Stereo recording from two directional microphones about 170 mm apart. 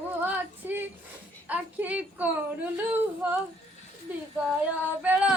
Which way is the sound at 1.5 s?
10° right (ahead or behind).